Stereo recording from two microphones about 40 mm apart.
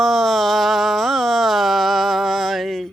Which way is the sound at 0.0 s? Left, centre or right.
Centre.